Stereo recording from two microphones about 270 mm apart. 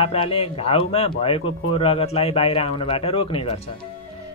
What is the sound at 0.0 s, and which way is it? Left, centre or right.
A man's voice, left.